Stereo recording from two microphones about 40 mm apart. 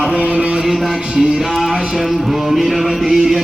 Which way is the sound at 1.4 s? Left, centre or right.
Centre.